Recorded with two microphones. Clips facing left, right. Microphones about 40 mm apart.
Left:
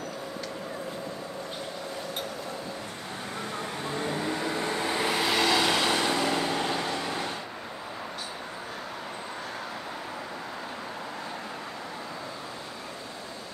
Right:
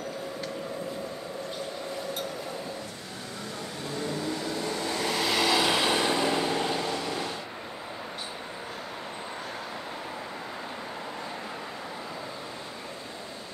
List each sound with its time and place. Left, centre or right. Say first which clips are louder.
3.8 s vehicle: left 1 dB; left
5.3 s vehicle: right 1 dB; centre
6.5 s vehicle: even; centre
6.8 s vehicle: even; left